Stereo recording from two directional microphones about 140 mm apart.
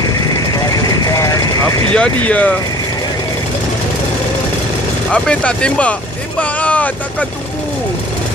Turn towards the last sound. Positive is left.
turn(degrees=10)  # may be behind; listen again after turning